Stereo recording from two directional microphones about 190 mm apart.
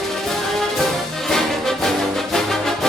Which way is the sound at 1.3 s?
Centre (ahead or behind).